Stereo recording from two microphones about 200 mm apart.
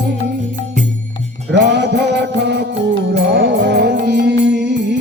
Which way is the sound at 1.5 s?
60° right (ahead or behind).